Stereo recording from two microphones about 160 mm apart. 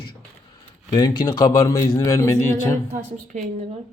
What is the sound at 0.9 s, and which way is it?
A man's voice, 25° left (ahead or behind).